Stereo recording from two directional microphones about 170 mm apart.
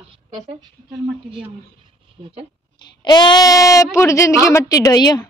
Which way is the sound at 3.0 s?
25° left (ahead or behind).